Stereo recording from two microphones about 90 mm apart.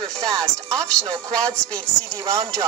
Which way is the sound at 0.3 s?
40° right (ahead or behind).